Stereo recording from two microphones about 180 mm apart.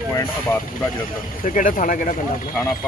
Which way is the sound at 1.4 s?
45° left (ahead or behind).